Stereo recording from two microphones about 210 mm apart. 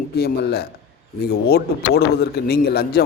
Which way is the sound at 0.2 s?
50° left (ahead or behind).